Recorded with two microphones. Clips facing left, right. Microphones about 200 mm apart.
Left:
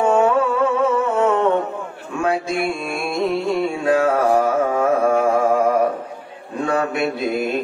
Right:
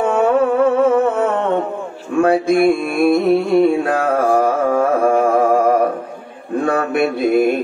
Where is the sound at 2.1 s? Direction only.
55° right (ahead or behind).